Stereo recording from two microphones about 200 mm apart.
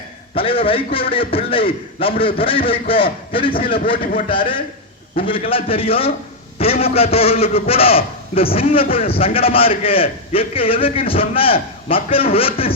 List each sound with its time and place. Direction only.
0.3 s a man's voice: 30° left (ahead or behind)
5.1 s a man's voice: 25° left (ahead or behind)